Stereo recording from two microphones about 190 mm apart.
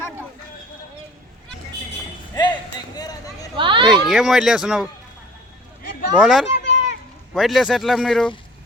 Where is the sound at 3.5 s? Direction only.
25° right (ahead or behind).